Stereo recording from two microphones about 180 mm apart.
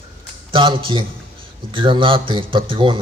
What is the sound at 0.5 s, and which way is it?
A man's voice, 30° right (ahead or behind).